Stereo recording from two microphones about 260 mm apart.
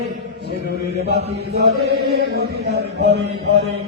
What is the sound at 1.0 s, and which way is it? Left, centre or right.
Chant, right.